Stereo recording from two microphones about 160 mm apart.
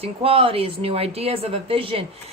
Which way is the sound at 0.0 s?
35° right (ahead or behind).